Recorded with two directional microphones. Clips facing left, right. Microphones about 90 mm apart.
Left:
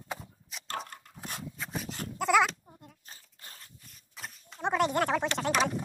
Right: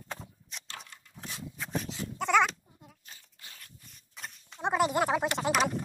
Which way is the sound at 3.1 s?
35° left (ahead or behind).